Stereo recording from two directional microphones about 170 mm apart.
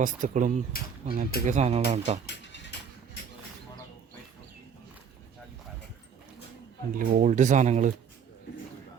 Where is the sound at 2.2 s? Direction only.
90° left.